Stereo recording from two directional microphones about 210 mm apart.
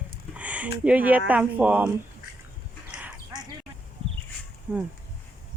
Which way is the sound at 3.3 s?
20° right (ahead or behind).